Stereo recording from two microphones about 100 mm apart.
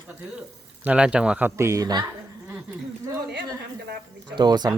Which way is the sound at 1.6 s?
30° right (ahead or behind).